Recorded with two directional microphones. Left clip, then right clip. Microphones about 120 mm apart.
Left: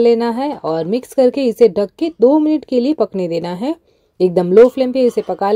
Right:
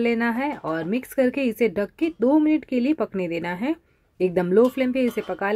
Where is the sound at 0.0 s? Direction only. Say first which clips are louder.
Left 10 dB; 40° left (ahead or behind).